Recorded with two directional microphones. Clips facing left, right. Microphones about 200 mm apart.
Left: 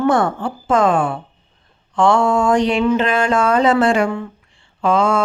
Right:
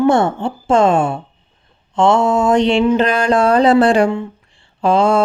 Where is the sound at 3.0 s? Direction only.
40° right (ahead or behind).